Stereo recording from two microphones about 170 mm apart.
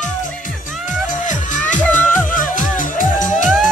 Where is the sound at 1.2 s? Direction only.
45° left (ahead or behind).